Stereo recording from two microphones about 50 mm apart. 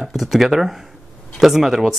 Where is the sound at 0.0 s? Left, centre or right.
Centre.